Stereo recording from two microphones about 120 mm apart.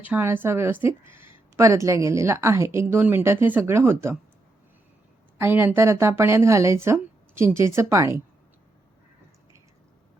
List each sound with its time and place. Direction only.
0.0 s a woman's voice: 15° right (ahead or behind)
5.4 s a woman's voice: 15° right (ahead or behind)